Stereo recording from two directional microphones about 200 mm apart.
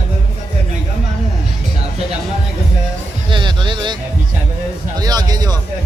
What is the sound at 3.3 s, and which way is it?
Speech, 25° right (ahead or behind).